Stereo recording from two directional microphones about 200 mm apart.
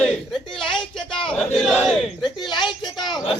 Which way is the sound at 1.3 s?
5° left (ahead or behind).